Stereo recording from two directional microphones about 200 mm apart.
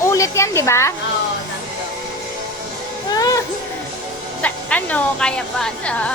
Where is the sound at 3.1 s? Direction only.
20° left (ahead or behind).